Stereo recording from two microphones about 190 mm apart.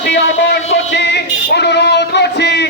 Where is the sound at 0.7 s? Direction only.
65° left (ahead or behind).